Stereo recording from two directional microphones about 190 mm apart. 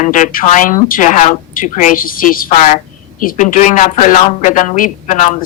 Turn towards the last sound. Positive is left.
turn(degrees=40)  # may be behind; listen again after turning